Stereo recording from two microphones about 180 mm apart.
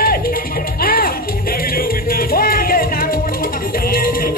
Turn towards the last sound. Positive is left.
turn(degrees=55)  # may be behind; listen again after turning